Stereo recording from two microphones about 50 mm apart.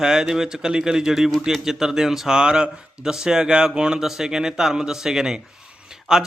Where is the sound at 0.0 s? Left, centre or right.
Centre.